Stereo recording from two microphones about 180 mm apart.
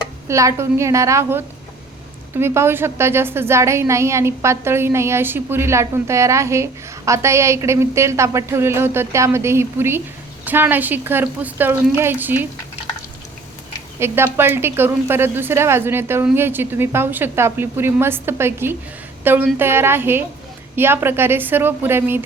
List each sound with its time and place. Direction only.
0.3 s a woman's voice: 15° right (ahead or behind)
14.0 s a woman's voice: 15° right (ahead or behind)